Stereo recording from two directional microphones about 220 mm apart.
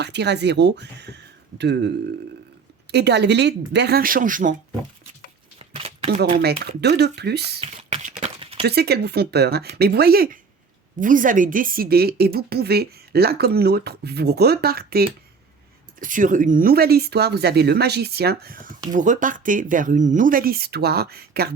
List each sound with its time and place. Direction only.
0.0 s speech: 50° right (ahead or behind)
2.9 s a woman's voice: 50° right (ahead or behind)
5.5 s a sound: 25° right (ahead or behind)
6.4 s a woman's voice: 50° right (ahead or behind)
7.6 s a sound: 30° right (ahead or behind)
8.6 s a woman's voice: 45° right (ahead or behind)